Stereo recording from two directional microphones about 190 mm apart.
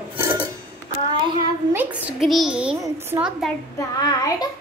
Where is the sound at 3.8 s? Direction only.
20° left (ahead or behind).